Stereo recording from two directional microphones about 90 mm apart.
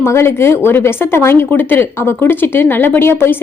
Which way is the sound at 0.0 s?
30° left (ahead or behind).